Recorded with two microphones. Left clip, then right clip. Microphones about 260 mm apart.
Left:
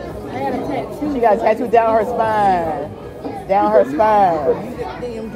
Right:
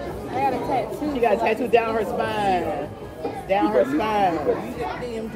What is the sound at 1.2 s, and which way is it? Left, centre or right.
Speech, left.